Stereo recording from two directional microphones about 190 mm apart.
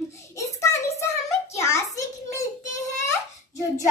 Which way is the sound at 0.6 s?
15° left (ahead or behind).